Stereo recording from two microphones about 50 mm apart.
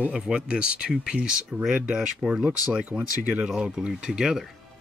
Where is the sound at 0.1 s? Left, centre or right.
Centre.